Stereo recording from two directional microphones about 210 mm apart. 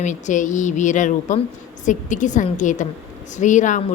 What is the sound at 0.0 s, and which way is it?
A woman's voice, 35° left (ahead or behind).